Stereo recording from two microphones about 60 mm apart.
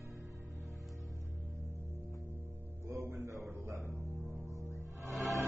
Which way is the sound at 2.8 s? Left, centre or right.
Right.